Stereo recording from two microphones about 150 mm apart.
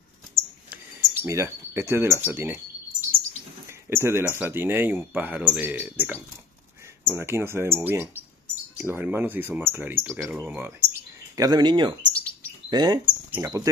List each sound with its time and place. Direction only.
0.3 s a sound: 15° right (ahead or behind)
3.9 s speech: 15° right (ahead or behind)
11.3 s chirp: 25° right (ahead or behind)
13.3 s speech: 20° right (ahead or behind)